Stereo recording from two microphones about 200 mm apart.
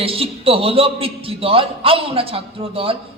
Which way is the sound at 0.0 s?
30° right (ahead or behind).